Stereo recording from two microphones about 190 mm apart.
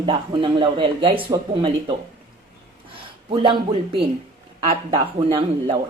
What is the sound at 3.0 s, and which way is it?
Speech, 25° right (ahead or behind).